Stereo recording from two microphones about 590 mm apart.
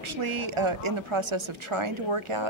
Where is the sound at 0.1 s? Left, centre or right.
Right.